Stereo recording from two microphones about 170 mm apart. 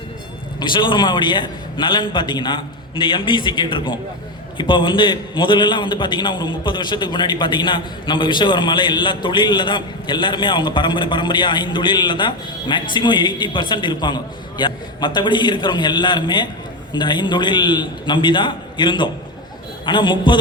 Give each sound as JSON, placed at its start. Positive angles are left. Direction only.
{"t": 0.6, "sound": "a man's voice", "side_deg": 30}